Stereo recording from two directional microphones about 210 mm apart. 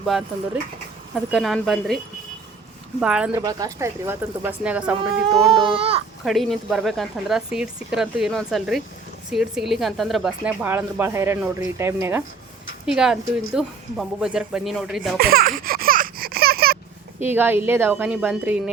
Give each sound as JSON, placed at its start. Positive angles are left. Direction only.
{"t": 0.0, "sound": "speech", "side_deg": 0}
{"t": 3.0, "sound": "speech", "side_deg": -5}
{"t": 3.4, "sound": "speech", "side_deg": -15}
{"t": 5.5, "sound": "speech", "side_deg": -25}
{"t": 6.2, "sound": "speech", "side_deg": 0}
{"t": 15.2, "sound": "a sound", "side_deg": -45}
{"t": 17.2, "sound": "speech", "side_deg": -10}